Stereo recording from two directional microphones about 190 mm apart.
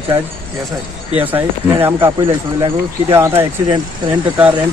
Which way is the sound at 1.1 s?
10° right (ahead or behind).